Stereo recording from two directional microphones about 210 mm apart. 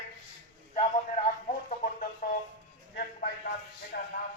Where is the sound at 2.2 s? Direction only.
45° left (ahead or behind).